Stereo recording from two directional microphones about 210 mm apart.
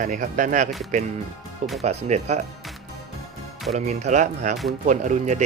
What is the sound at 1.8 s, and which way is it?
Speech, 30° right (ahead or behind).